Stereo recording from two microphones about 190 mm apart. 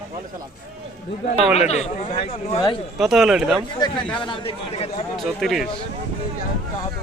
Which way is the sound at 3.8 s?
20° left (ahead or behind).